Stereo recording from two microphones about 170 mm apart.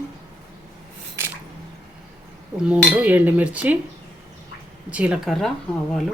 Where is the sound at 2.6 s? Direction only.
10° right (ahead or behind).